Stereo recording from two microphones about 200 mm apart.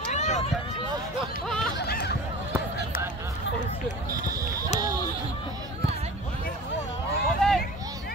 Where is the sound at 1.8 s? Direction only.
55° left (ahead or behind).